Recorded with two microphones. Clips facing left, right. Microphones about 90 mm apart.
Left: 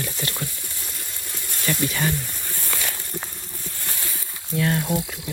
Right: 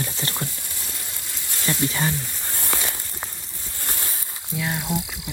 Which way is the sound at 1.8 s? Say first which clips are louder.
Right 1 dB; 25° right (ahead or behind).